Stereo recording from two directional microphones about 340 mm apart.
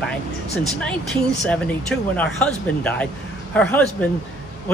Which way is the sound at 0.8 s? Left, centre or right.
Centre.